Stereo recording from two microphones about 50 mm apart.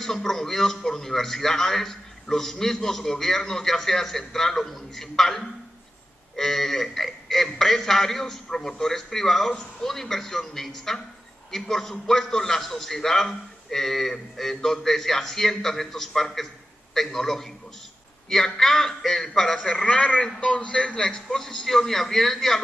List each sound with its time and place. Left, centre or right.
0.0 s a man's voice: centre
19.7 s a man's voice: centre